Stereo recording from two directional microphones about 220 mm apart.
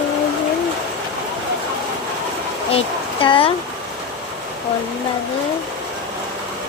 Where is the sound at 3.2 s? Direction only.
25° left (ahead or behind).